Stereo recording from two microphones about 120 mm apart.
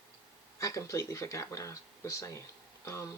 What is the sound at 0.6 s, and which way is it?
Speech, 25° left (ahead or behind).